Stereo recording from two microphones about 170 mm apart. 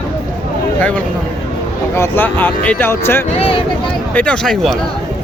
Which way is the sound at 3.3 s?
35° left (ahead or behind).